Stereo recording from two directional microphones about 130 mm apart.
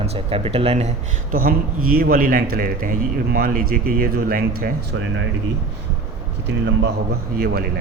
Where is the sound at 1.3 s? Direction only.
90° right.